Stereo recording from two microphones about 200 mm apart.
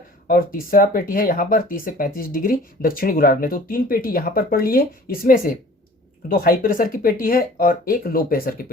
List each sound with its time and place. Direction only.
0.3 s speech: 45° left (ahead or behind)